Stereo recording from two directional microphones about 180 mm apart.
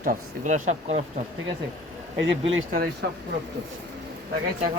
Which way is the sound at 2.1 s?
80° right.